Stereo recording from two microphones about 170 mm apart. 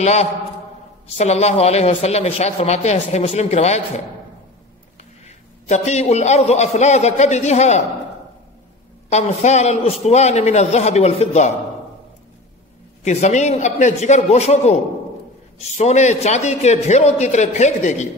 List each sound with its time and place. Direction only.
0.0 s speech: 40° left (ahead or behind)
5.2 s speech: 40° left (ahead or behind)
9.1 s speech: 40° left (ahead or behind)
13.0 s speech: 40° left (ahead or behind)
15.8 s a man's voice: 40° left (ahead or behind)